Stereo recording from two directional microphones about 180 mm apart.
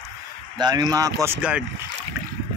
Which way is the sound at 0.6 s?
25° right (ahead or behind).